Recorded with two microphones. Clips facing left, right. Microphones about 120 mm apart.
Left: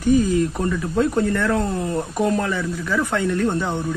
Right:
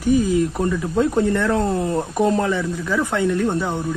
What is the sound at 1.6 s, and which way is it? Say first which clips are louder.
Speech: right 3 dB; 30° right (ahead or behind).